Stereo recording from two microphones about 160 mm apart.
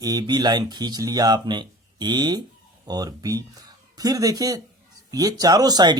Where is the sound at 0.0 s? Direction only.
25° right (ahead or behind).